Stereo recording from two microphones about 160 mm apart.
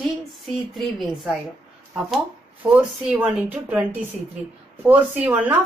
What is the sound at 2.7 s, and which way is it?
A woman's voice, 5° right (ahead or behind).